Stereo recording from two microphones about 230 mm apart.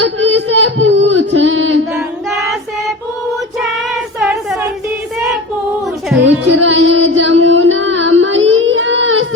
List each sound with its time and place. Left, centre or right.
0.0 s a sound: right
2.0 s child singing: centre
3.6 s child singing: centre
6.2 s music: right
8.4 s child singing: right